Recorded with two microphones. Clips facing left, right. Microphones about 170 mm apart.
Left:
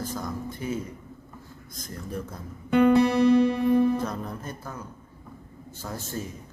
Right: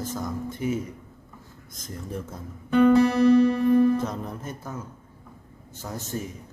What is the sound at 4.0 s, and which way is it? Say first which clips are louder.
Music: right 1 dB; 20° right (ahead or behind).